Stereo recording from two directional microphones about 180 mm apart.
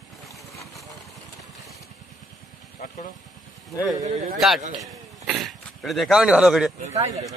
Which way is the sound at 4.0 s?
45° right (ahead or behind).